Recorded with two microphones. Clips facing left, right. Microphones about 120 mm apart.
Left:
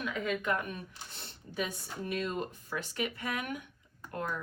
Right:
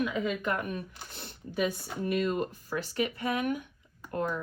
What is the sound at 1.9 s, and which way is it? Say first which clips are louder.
Speech: right 6 dB; 50° right (ahead or behind).